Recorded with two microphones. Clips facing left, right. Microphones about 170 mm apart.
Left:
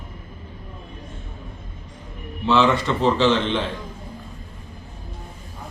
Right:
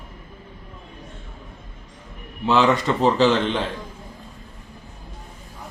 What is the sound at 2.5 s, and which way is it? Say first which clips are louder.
Speech: even; 40° right (ahead or behind).